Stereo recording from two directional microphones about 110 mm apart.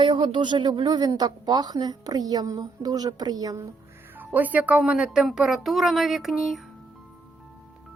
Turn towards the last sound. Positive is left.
turn(degrees=0)  # may be behind; listen again after turning